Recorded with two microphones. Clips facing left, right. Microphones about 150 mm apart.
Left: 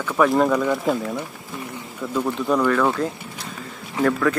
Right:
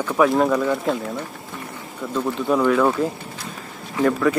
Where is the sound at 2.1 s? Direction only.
Centre (ahead or behind).